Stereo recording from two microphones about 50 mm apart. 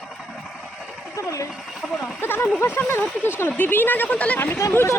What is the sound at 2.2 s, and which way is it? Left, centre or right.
Speech, left.